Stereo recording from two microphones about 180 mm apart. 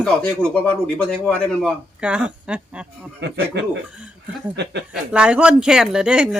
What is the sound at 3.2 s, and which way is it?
Speech, 70° right (ahead or behind).